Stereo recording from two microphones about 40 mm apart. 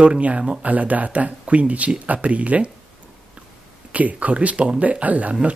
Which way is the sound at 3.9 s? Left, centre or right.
Right.